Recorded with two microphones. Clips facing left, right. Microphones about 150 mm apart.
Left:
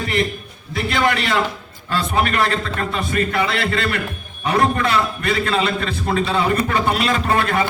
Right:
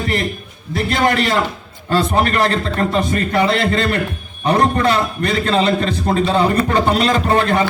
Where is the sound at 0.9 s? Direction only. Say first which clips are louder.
Right 3 dB; 40° right (ahead or behind).